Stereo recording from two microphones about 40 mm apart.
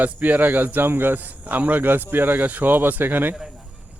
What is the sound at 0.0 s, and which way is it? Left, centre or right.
Speech, right.